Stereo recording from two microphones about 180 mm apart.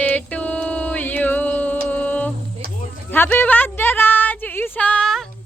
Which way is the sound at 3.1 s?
10° left (ahead or behind).